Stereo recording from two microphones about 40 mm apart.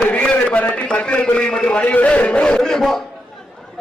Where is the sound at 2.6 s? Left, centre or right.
Centre.